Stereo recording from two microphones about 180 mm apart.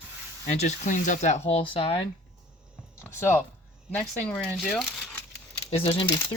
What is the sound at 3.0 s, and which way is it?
Speech, 15° left (ahead or behind).